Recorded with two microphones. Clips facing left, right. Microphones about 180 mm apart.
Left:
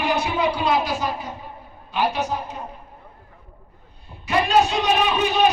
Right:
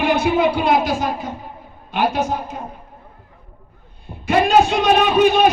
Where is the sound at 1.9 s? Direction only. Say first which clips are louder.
Right 4 dB; 50° right (ahead or behind).